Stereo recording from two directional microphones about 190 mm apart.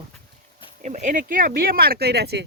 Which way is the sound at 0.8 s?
40° right (ahead or behind).